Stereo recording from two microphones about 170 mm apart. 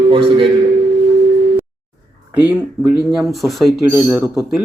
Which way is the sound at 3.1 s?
Centre (ahead or behind).